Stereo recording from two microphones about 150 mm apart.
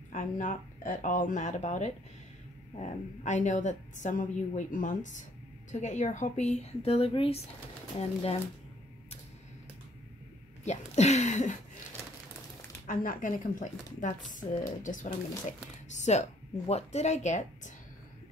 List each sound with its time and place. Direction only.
0.1 s a woman's voice: 55° left (ahead or behind); by 8.4 s 40° left (ahead or behind)
10.6 s speech: 50° left (ahead or behind)
12.8 s a woman's voice: 65° left (ahead or behind)
15.9 s speech: 50° left (ahead or behind)